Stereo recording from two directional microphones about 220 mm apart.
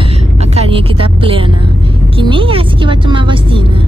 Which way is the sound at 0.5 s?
25° right (ahead or behind).